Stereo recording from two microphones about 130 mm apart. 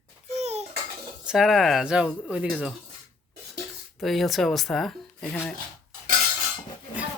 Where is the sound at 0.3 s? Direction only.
55° right (ahead or behind).